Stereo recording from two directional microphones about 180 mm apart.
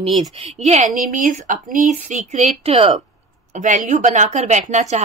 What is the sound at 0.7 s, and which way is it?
A woman's voice, 45° right (ahead or behind).